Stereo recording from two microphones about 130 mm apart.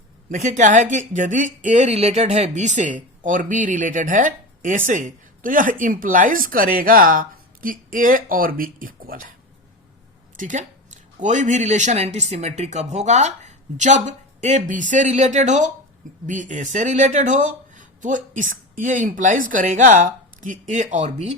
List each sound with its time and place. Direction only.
0.3 s speech: 70° right (ahead or behind); by 9.3 s 90° right
10.3 s speech: 75° right (ahead or behind)